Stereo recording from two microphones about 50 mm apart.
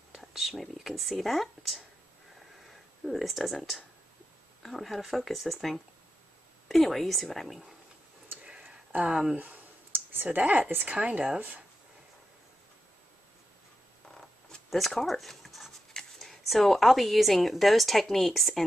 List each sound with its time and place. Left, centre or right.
0.2 s speech: centre
3.1 s speech: centre
8.6 s a sound: right
10.2 s speech: right
14.7 s speech: centre